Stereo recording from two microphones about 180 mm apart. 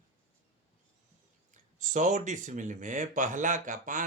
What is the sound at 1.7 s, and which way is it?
Speech, 45° right (ahead or behind).